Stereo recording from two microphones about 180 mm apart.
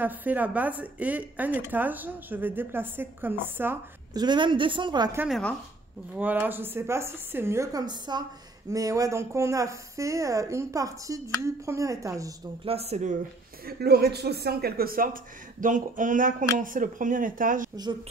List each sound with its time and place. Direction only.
0.0 s a woman's voice: 10° right (ahead or behind)
4.1 s a woman's voice: 25° right (ahead or behind)
5.3 s speech: 5° left (ahead or behind)
6.1 s a woman's voice: 10° right (ahead or behind)
12.6 s speech: 35° right (ahead or behind)
13.7 s speech: 60° right (ahead or behind)
15.6 s speech: 45° right (ahead or behind)